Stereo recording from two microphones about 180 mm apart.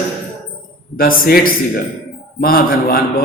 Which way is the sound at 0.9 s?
55° left (ahead or behind).